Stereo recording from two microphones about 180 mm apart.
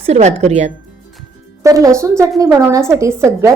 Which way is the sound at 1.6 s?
15° right (ahead or behind).